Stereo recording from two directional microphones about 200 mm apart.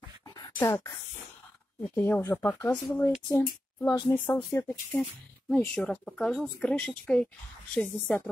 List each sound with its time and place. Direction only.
0.6 s speech: 15° left (ahead or behind)
3.9 s speech: 15° left (ahead or behind)